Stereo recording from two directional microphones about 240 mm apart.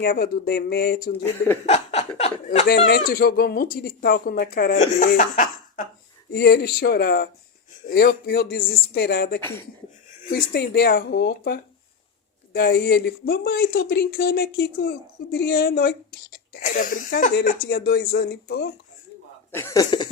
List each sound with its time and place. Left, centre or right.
0.0 s a woman's voice: left
1.6 s speech: left
2.6 s a woman's voice: left
9.4 s speech: centre
10.2 s a woman's voice: left
19.5 s speech: centre